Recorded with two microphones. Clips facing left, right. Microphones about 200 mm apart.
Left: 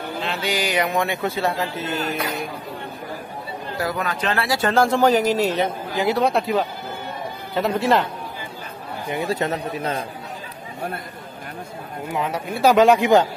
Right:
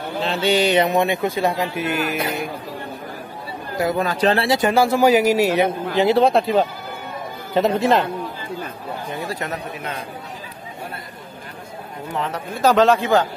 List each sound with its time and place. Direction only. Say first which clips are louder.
0.2 s speech: right 7 dB; 30° right (ahead or behind); by 2.0 s 10° right (ahead or behind)
2.1 s speech: right 2 dB; 25° right (ahead or behind)
3.7 s speech: right 5 dB; 25° right (ahead or behind)
4.5 s speech: right 2 dB; 15° right (ahead or behind)
5.9 s speech: right 4 dB; 25° right (ahead or behind)
9.1 s a man's voice: left 6 dB; 25° left (ahead or behind)
12.1 s a man's voice: left 1 dB; 10° left (ahead or behind)